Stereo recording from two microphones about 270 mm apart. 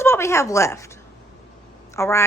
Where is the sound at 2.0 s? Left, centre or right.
Centre.